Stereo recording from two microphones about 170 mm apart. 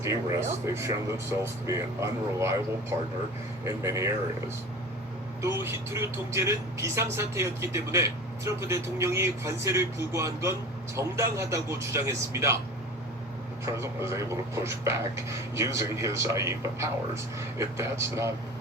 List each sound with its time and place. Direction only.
0.0 s speech: 15° right (ahead or behind)
3.7 s speech: 15° right (ahead or behind)
5.4 s speech: 15° right (ahead or behind)
13.7 s speech: 15° right (ahead or behind)